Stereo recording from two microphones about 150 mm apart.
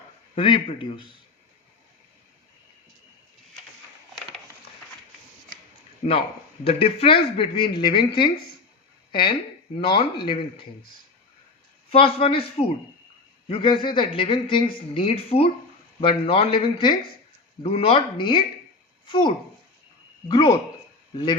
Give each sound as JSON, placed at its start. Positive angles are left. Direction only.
{"t": 0.3, "sound": "speech", "side_deg": 35}
{"t": 6.7, "sound": "speech", "side_deg": 40}
{"t": 9.7, "sound": "speech", "side_deg": 35}
{"t": 11.9, "sound": "speech", "side_deg": 40}